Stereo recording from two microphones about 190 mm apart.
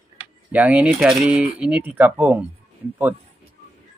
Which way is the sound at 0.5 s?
5° right (ahead or behind).